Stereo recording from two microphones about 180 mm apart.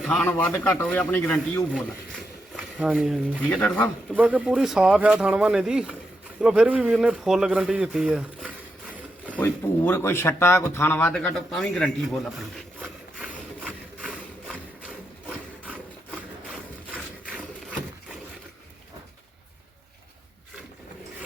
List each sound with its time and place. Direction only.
0.0 s a man's voice: 5° left (ahead or behind)
2.6 s speech: 5° right (ahead or behind)
3.5 s a man's voice: 10° left (ahead or behind)
4.1 s speech: 10° right (ahead or behind)
9.2 s speech: 10° left (ahead or behind)
16.9 s wood: 5° right (ahead or behind)